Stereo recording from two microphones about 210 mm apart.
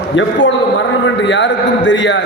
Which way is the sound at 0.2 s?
60° left (ahead or behind).